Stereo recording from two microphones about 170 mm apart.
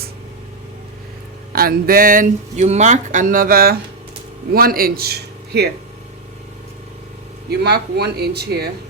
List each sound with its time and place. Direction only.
1.5 s a man's voice: 60° right (ahead or behind)
7.5 s speech: 70° right (ahead or behind)